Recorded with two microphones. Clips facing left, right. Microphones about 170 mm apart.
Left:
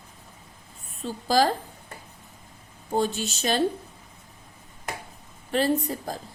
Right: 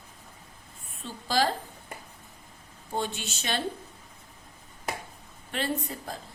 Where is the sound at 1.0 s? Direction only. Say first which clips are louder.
Left 5 dB; 40° left (ahead or behind).